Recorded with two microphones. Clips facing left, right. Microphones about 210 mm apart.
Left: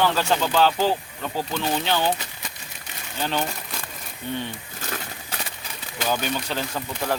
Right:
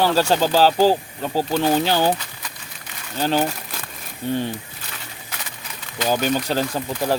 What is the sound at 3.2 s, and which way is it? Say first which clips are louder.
Speech: right 6 dB; 35° right (ahead or behind).